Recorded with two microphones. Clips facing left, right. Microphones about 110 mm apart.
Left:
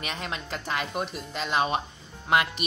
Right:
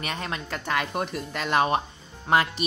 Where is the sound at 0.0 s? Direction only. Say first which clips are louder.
Right 2 dB; 45° right (ahead or behind).